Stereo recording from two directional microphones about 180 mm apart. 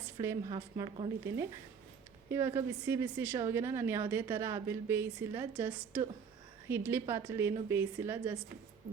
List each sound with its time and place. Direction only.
0.0 s a sound: 15° right (ahead or behind)
0.4 s a woman's voice: 25° right (ahead or behind)
2.3 s speech: 15° right (ahead or behind)